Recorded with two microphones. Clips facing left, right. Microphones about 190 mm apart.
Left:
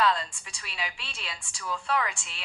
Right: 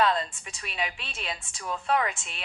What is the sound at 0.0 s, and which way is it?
A woman's voice, 20° right (ahead or behind).